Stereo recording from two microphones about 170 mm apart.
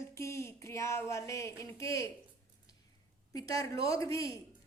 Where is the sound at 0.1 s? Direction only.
15° left (ahead or behind).